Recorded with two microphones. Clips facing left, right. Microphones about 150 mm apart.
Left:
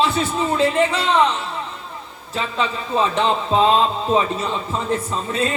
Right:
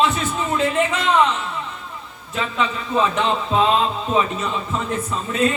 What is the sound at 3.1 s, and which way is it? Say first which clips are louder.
Speech: left 1 dB; 30° left (ahead or behind).